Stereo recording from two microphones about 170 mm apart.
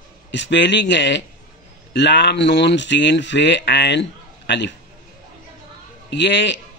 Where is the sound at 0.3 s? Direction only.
90° left.